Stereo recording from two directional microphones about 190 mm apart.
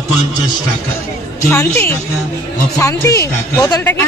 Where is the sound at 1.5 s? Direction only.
10° left (ahead or behind).